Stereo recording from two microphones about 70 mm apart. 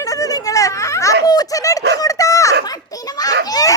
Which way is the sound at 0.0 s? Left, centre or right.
Left.